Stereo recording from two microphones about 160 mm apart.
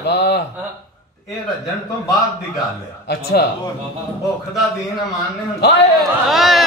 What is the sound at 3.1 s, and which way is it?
Speech, 90° left.